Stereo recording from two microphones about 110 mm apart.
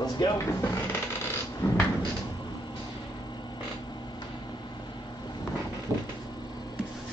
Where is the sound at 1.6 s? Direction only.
40° left (ahead or behind).